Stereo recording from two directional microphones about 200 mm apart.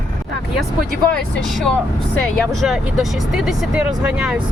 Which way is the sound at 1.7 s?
5° left (ahead or behind).